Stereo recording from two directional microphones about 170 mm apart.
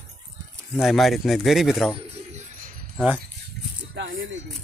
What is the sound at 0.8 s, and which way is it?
Speech, centre (ahead or behind).